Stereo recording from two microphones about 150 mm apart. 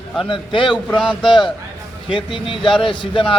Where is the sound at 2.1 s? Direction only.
35° left (ahead or behind).